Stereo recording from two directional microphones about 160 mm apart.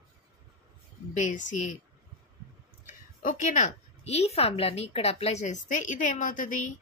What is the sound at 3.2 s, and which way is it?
A woman's voice, 55° left (ahead or behind).